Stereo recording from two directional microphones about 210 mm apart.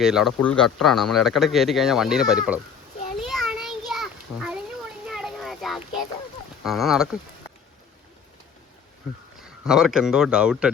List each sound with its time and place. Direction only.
0.0 s speech: centre (ahead or behind)
3.2 s a sound: centre (ahead or behind)
6.6 s speech: centre (ahead or behind)
9.6 s speech: centre (ahead or behind)